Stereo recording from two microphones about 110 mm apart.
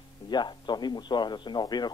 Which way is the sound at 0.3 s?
40° left (ahead or behind).